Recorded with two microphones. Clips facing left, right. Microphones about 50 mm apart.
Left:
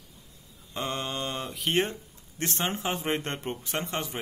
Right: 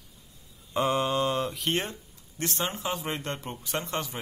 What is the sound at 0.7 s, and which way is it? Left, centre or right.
Mantra, centre.